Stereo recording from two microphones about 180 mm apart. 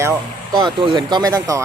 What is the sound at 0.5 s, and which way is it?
Speech, 25° right (ahead or behind).